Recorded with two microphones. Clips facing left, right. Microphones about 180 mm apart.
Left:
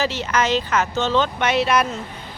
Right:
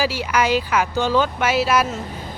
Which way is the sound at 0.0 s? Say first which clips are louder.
Right 1 dB; 10° right (ahead or behind).